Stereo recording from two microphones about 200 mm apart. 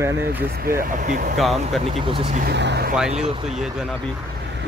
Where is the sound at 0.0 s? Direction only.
15° right (ahead or behind).